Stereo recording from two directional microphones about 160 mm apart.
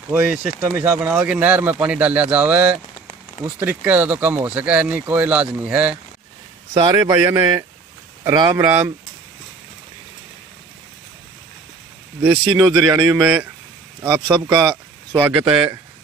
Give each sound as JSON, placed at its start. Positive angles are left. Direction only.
{"t": 0.1, "sound": "speech", "side_deg": -10}
{"t": 6.7, "sound": "speech", "side_deg": -25}
{"t": 7.0, "sound": "speech", "side_deg": -15}
{"t": 12.7, "sound": "speech", "side_deg": -20}
{"t": 15.2, "sound": "speech", "side_deg": -5}